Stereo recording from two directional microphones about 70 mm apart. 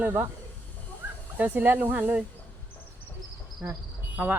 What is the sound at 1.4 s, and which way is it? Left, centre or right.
Speech, right.